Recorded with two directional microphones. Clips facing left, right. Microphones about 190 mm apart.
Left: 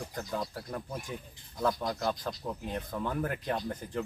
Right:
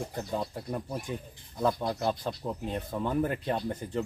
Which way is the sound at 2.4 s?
10° right (ahead or behind).